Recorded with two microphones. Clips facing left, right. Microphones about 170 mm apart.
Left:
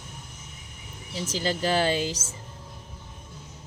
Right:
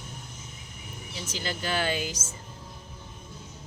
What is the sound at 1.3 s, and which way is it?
Speech, 35° left (ahead or behind).